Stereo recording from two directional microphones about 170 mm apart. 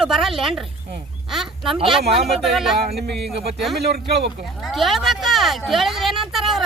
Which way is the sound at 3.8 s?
75° right (ahead or behind).